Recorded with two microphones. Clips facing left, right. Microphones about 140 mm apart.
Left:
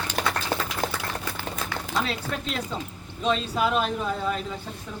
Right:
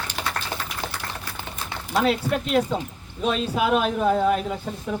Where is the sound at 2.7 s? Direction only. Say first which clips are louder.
Right 5 dB; 50° right (ahead or behind).